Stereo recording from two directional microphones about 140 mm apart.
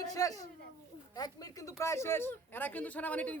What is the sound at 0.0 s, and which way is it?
A man's voice, 25° left (ahead or behind).